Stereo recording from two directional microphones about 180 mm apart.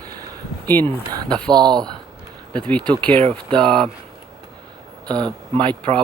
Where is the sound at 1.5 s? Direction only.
25° right (ahead or behind).